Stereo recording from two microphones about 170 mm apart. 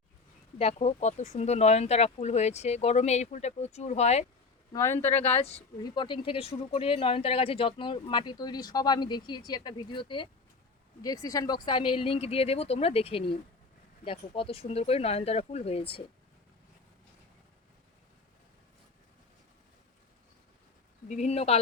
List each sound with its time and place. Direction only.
0.6 s speech: 40° left (ahead or behind)
4.7 s speech: 15° left (ahead or behind)
5.3 s speech: 40° left (ahead or behind)
5.8 s speech: 25° left (ahead or behind)
21.1 s speech: 40° left (ahead or behind)